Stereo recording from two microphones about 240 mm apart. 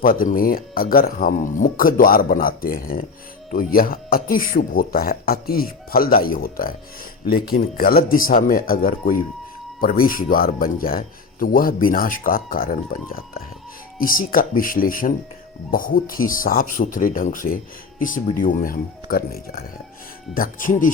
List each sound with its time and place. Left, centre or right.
0.0 s speech: left